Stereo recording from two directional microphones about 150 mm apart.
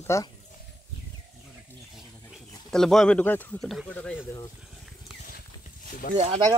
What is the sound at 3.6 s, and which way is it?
Speech, centre (ahead or behind).